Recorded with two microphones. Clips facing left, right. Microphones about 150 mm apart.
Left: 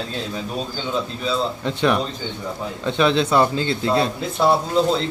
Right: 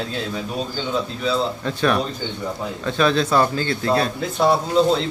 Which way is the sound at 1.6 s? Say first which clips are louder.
Even; 20° left (ahead or behind).